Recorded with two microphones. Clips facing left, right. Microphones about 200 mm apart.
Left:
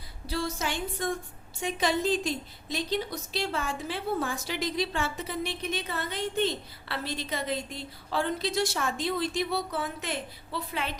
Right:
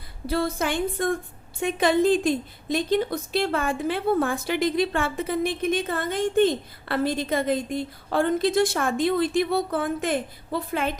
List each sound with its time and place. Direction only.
0.3 s a woman's voice: 55° right (ahead or behind)